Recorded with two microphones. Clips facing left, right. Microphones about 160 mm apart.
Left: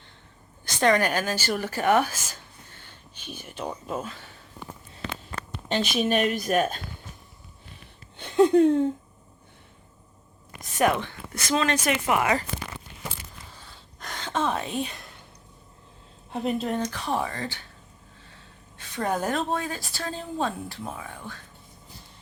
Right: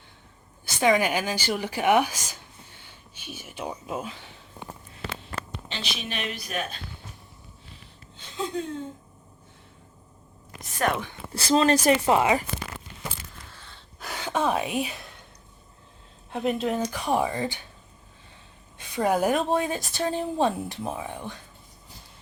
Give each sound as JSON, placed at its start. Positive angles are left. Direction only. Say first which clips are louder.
{"t": 0.6, "sound": "speech", "louder": "even", "side_deg": -10}
{"t": 5.6, "sound": "a woman's voice", "louder": "left 16 dB", "side_deg": 50}
{"t": 8.1, "sound": "speech", "louder": "left 13 dB", "side_deg": 60}
{"t": 10.8, "sound": "speech", "louder": "left 3 dB", "side_deg": 10}
{"t": 11.3, "sound": "speech", "louder": "right 5 dB", "side_deg": -30}
{"t": 14.0, "sound": "speech", "louder": "right 1 dB", "side_deg": -10}
{"t": 16.3, "sound": "speech", "louder": "right 1 dB", "side_deg": 0}
{"t": 18.8, "sound": "a woman's voice", "louder": "right 4 dB", "side_deg": -10}